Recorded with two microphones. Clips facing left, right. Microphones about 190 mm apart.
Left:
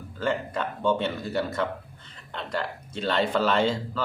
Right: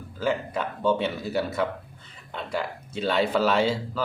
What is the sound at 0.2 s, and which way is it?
Speech, 5° right (ahead or behind).